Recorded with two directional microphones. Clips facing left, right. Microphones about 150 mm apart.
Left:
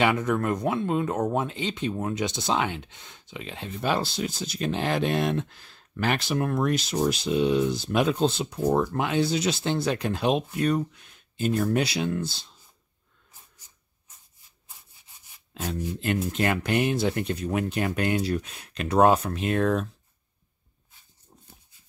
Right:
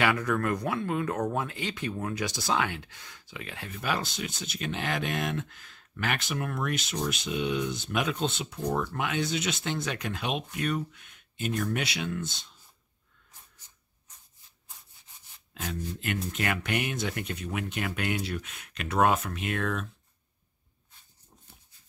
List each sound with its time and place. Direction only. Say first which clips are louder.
0.0 s speech: left 3 dB; 20° left (ahead or behind)
16.0 s speech: left 7 dB; 30° left (ahead or behind)